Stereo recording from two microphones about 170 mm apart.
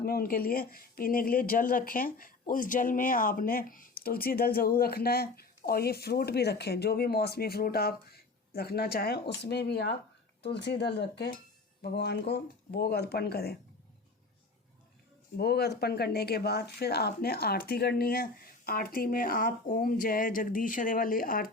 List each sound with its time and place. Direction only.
0.0 s speech: 60° left (ahead or behind)
15.4 s speech: 70° left (ahead or behind)